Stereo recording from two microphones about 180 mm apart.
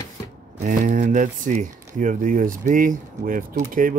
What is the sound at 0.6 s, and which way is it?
Speech, 45° right (ahead or behind).